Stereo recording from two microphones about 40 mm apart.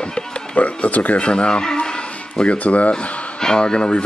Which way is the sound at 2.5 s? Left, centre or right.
Left.